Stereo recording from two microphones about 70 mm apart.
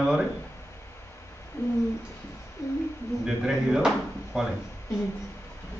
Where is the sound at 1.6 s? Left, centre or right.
Left.